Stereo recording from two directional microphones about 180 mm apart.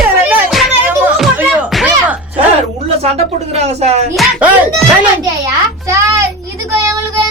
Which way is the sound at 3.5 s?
35° right (ahead or behind).